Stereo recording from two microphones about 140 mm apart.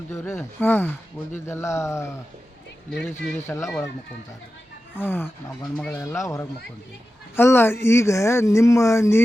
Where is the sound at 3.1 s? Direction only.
20° left (ahead or behind).